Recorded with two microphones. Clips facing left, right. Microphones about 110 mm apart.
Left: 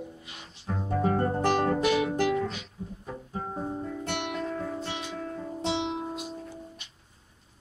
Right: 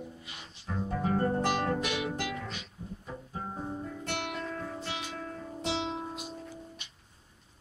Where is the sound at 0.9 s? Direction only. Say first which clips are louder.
Left 3 dB; 35° left (ahead or behind).